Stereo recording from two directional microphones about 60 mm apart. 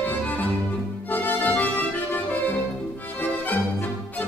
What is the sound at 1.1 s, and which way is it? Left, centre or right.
Music, left.